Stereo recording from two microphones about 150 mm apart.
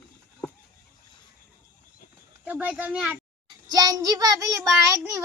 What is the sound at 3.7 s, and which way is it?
Child singing, 25° right (ahead or behind).